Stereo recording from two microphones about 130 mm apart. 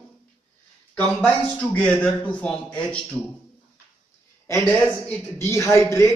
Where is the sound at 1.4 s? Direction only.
10° left (ahead or behind).